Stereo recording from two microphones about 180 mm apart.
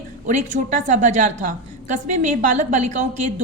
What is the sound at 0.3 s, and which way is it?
A woman's voice, 45° right (ahead or behind).